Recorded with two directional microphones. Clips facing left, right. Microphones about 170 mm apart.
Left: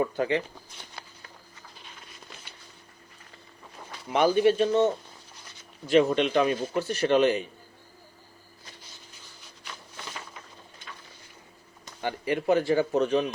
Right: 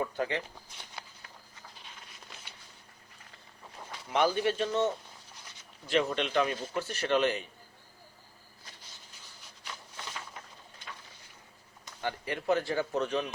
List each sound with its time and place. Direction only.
0.0 s a man's voice: 15° left (ahead or behind)
4.1 s a man's voice: 15° left (ahead or behind)
5.8 s a man's voice: 15° left (ahead or behind)
12.0 s a man's voice: 15° left (ahead or behind)